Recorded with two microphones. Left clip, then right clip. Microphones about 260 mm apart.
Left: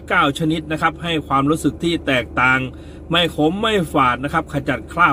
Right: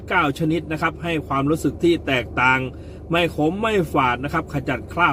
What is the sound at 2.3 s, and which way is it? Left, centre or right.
Speech, centre.